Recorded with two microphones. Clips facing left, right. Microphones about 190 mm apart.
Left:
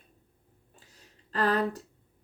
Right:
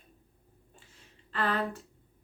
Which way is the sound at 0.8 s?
40° left (ahead or behind).